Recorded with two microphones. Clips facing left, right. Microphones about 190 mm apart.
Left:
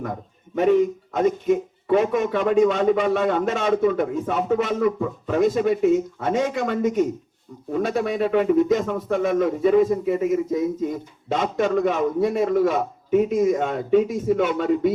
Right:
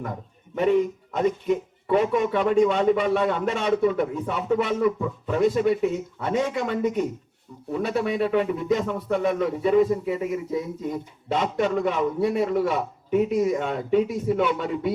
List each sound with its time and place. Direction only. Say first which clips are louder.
0.5 s a man's voice: left 3 dB; 45° left (ahead or behind)